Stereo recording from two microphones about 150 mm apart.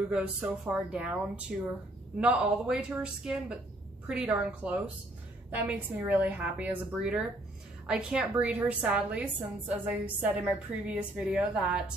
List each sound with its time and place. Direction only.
0.1 s a woman's voice: 5° right (ahead or behind)